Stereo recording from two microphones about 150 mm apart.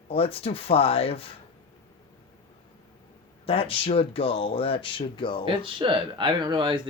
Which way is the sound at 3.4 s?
40° left (ahead or behind).